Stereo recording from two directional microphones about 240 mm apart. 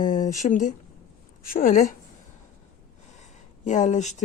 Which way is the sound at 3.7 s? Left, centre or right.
Left.